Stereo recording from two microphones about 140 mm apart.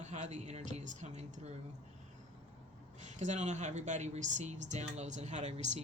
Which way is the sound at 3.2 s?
55° right (ahead or behind).